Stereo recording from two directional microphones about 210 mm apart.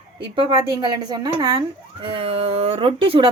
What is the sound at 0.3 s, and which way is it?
Speech, 25° right (ahead or behind).